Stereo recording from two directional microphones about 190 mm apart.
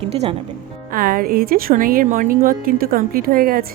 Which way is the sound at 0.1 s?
35° right (ahead or behind).